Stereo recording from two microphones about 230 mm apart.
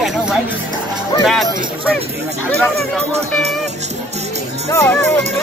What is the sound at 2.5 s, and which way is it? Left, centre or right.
Speech, centre.